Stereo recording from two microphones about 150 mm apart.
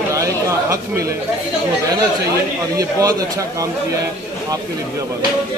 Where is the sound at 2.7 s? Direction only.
25° right (ahead or behind).